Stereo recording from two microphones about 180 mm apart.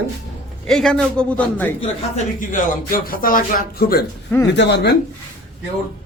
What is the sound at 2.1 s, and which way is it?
Speech, 45° left (ahead or behind).